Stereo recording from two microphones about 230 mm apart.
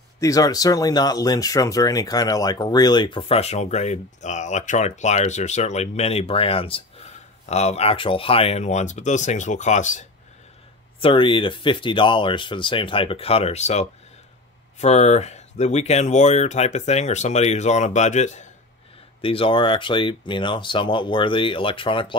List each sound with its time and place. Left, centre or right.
0.2 s speech: centre